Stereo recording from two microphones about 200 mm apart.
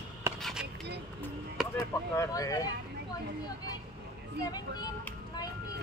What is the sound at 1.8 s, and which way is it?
Speech, 15° left (ahead or behind).